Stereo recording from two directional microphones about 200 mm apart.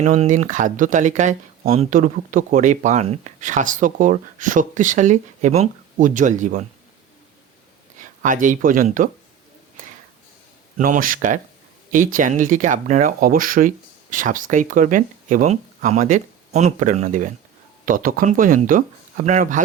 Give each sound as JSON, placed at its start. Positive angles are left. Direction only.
{"t": 0.0, "sound": "speech", "side_deg": -40}
{"t": 8.2, "sound": "speech", "side_deg": -40}
{"t": 10.8, "sound": "speech", "side_deg": -40}